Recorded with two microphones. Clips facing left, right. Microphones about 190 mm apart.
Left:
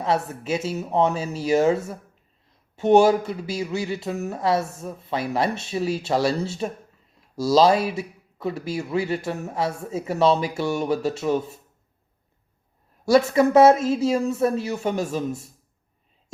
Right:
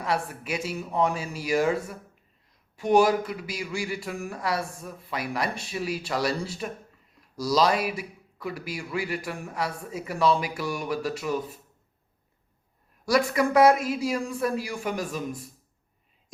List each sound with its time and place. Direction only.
0.0 s a man's voice: 25° left (ahead or behind)
13.1 s a man's voice: 25° left (ahead or behind)